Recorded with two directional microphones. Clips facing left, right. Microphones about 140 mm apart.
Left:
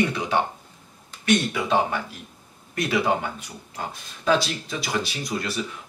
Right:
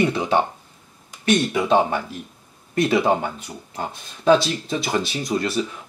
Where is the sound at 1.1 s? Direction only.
20° right (ahead or behind).